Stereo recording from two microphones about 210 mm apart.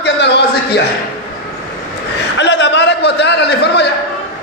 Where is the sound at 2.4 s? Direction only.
55° left (ahead or behind).